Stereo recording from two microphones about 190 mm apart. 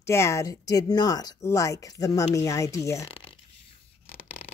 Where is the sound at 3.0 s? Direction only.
30° left (ahead or behind).